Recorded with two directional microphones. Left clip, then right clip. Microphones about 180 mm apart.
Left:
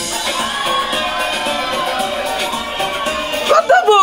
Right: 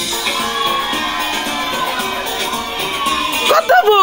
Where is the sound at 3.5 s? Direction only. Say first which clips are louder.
Even; 25° right (ahead or behind).